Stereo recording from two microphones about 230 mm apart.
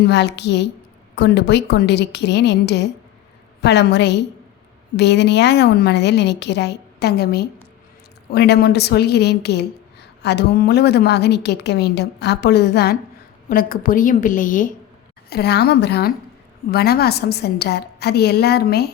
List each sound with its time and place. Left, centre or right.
0.0 s a woman's voice: left